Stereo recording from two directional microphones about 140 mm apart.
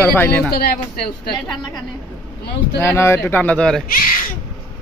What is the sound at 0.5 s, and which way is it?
Speech, 90° left.